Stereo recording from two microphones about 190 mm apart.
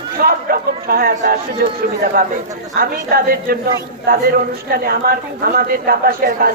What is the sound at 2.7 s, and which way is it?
A man's voice, 50° right (ahead or behind).